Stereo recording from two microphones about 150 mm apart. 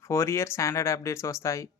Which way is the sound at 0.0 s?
20° left (ahead or behind).